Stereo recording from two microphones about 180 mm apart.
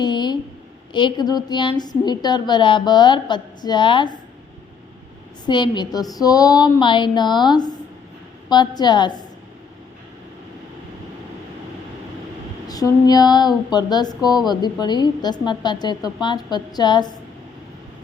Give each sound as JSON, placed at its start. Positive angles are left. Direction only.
{"t": 0.0, "sound": "a sound", "side_deg": 25}
{"t": 0.9, "sound": "a woman's voice", "side_deg": 25}
{"t": 5.5, "sound": "a woman's voice", "side_deg": 25}
{"t": 12.6, "sound": "female singing", "side_deg": 20}
{"t": 13.7, "sound": "a woman's voice", "side_deg": 25}